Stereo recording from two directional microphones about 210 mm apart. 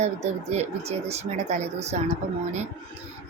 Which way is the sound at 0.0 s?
30° right (ahead or behind).